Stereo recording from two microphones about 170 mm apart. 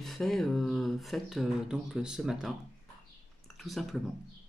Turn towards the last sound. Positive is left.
turn(degrees=0)  # may be behind; listen again after turning